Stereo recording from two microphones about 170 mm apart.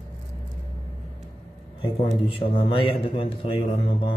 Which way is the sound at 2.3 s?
35° left (ahead or behind).